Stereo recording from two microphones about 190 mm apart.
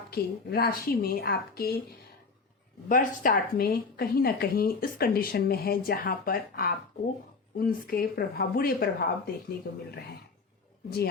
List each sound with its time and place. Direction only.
0.1 s speech: 55° left (ahead or behind)
2.9 s speech: 45° left (ahead or behind)